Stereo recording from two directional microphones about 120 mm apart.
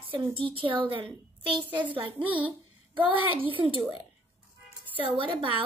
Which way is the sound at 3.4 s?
45° right (ahead or behind).